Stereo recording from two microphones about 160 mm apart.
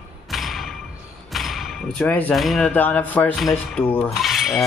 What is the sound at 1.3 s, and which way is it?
Basketball bounce, centre (ahead or behind).